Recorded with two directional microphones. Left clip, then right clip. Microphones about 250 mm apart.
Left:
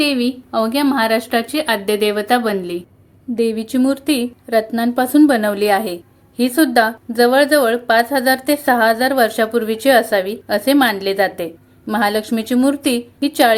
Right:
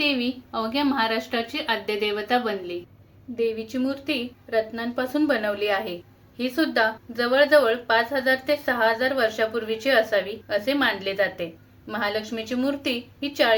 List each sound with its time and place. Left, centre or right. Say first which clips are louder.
0.0 s speech: left 7 dB; left